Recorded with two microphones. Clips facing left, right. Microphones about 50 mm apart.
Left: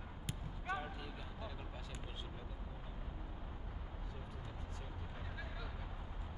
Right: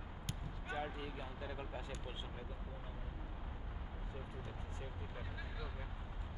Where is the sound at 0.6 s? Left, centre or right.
Centre.